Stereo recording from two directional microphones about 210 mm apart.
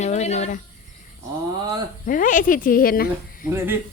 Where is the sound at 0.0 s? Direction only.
30° left (ahead or behind).